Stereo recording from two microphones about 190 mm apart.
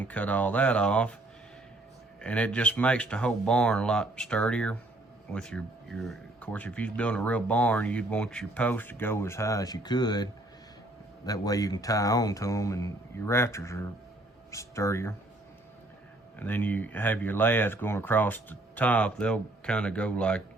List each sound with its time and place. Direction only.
0.1 s speech: 10° left (ahead or behind)
2.2 s speech: 5° left (ahead or behind); by 10.2 s 20° left (ahead or behind)
11.3 s speech: 20° left (ahead or behind)
16.4 s speech: 10° left (ahead or behind)